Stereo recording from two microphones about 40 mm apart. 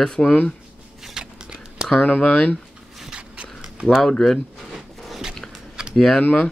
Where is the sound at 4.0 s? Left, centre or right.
Centre.